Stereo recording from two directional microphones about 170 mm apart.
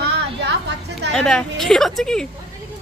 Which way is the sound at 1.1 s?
5° left (ahead or behind).